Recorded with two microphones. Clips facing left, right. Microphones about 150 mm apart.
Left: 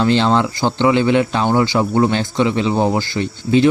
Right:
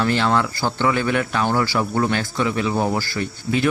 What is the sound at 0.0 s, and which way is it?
Speech, 25° left (ahead or behind).